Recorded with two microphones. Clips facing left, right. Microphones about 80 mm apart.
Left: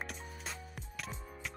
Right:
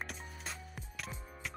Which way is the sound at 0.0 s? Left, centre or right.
Centre.